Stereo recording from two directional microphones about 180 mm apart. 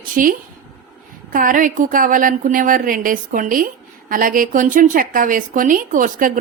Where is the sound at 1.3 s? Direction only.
50° right (ahead or behind).